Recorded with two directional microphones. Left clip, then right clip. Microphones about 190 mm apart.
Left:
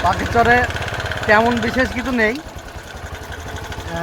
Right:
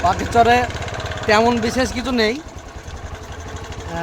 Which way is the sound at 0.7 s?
45° left (ahead or behind).